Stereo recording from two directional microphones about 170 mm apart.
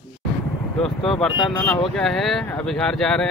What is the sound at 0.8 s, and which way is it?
Speech, 5° left (ahead or behind).